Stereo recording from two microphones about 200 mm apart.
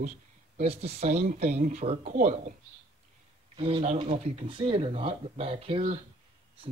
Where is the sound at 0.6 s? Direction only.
30° right (ahead or behind).